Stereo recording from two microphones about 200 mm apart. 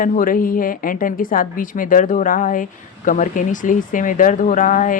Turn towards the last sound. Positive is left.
turn(degrees=40)  # may be behind; listen again after turning